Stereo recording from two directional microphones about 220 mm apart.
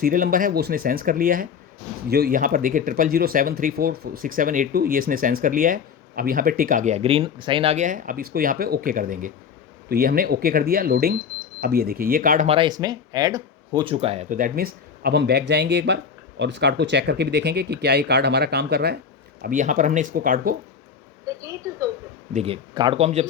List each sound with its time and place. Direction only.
0.0 s speech: 40° right (ahead or behind)
12.5 s speech: 20° right (ahead or behind); by 20.6 s 40° right (ahead or behind)
22.3 s speech: 30° right (ahead or behind)